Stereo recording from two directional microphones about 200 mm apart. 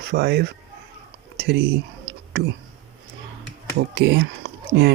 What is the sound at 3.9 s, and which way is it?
Speech, 60° right (ahead or behind).